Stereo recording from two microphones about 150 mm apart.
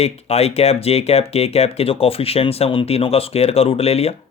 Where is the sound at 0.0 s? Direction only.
45° left (ahead or behind).